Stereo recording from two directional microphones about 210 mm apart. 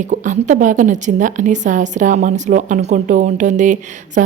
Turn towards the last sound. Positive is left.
turn(degrees=-35)  # may be behind; listen again after turning